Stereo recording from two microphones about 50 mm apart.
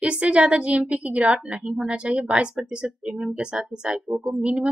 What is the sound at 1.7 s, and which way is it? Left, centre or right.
A woman's voice, centre.